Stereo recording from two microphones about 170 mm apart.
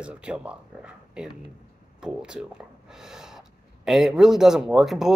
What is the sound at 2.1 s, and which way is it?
Speech, 5° right (ahead or behind).